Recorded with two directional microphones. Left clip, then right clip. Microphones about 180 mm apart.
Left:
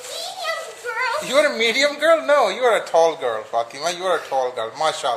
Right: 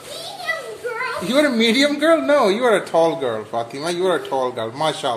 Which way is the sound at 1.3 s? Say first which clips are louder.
Even; 15° left (ahead or behind).